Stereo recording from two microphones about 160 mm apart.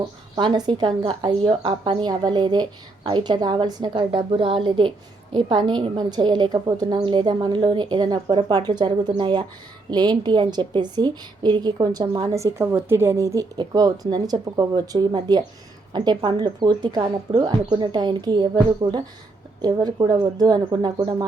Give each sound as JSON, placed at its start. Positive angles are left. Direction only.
{"t": 0.3, "sound": "a woman's voice", "side_deg": -30}